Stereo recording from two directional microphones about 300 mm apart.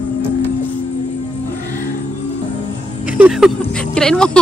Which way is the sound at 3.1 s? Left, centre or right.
Centre.